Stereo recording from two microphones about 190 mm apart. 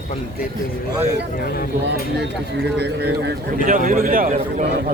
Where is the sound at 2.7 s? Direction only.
60° right (ahead or behind); by 4.4 s 45° right (ahead or behind).